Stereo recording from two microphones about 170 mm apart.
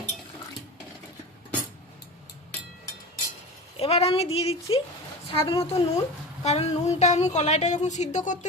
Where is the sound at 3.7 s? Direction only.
35° left (ahead or behind).